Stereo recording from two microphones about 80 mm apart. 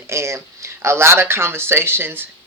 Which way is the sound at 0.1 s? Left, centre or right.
Right.